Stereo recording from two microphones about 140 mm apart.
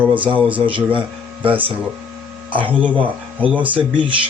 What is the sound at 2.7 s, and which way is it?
Speech, 10° right (ahead or behind).